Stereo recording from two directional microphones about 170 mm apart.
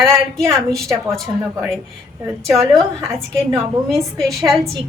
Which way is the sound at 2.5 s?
Centre (ahead or behind).